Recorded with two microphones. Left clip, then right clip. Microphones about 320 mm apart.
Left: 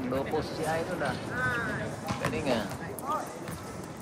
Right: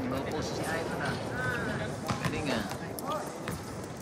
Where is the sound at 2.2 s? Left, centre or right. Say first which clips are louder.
Left 5 dB; centre.